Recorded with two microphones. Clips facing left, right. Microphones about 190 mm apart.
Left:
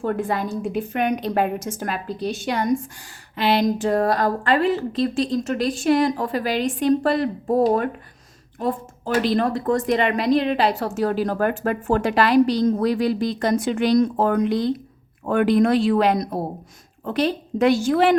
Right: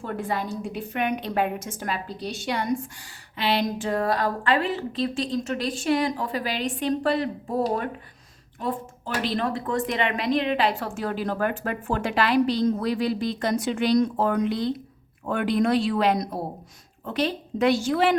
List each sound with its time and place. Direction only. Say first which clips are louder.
0.0 s a woman's voice: left 5 dB; 50° left (ahead or behind)